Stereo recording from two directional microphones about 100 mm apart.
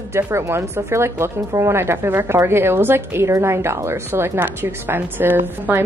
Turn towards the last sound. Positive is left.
turn(degrees=-20)  # may be behind; listen again after turning